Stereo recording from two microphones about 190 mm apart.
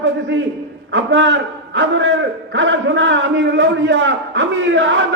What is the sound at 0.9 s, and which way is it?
A man's voice, 75° right (ahead or behind).